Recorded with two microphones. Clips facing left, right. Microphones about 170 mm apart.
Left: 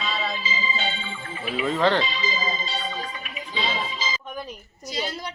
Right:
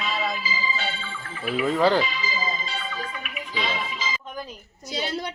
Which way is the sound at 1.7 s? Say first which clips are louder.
Right 1 dB; 10° right (ahead or behind).